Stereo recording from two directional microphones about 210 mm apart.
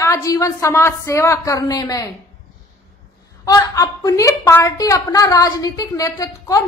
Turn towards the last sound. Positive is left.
turn(degrees=15)  # may be behind; listen again after turning